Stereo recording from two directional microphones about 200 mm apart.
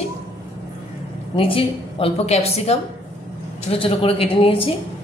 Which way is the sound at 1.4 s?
25° left (ahead or behind).